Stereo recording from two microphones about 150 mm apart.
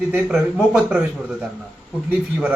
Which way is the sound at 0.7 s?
5° right (ahead or behind).